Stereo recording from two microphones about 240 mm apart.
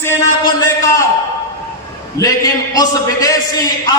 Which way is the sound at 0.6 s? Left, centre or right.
Centre.